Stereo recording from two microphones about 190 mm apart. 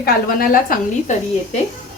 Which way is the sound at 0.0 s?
50° left (ahead or behind).